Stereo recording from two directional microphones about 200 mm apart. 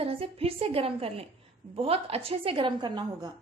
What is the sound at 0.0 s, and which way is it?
A woman's voice, 30° right (ahead or behind).